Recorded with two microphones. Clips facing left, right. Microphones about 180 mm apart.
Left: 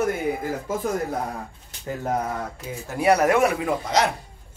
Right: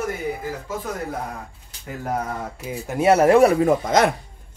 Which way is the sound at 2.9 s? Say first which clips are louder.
Right 4 dB; 25° right (ahead or behind).